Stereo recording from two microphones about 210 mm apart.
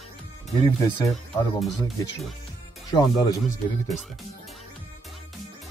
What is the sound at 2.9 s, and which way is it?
Speech, 15° left (ahead or behind).